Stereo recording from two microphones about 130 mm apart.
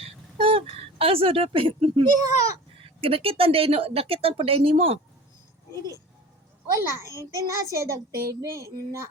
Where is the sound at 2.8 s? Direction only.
45° right (ahead or behind).